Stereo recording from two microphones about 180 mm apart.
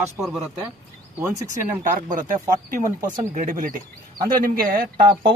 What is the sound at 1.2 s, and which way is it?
Speech, 15° right (ahead or behind).